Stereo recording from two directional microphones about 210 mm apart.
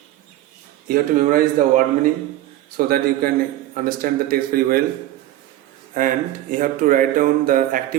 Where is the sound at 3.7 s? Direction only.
40° right (ahead or behind).